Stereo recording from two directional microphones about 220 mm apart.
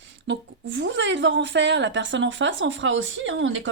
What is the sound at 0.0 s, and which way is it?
Speech, 55° right (ahead or behind).